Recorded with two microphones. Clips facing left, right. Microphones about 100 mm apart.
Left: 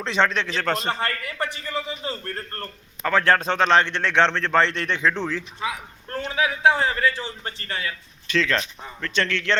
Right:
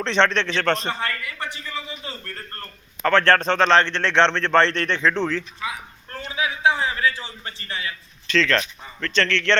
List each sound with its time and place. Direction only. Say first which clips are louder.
0.0 s a man's voice: right 2 dB; 5° left (ahead or behind)
0.9 s a man's voice: left 1 dB; 45° left (ahead or behind)
3.0 s a man's voice: right 2 dB; 5° left (ahead or behind)
6.1 s a man's voice: left 3 dB; 45° left (ahead or behind)
8.3 s a man's voice: right 2 dB; 15° left (ahead or behind)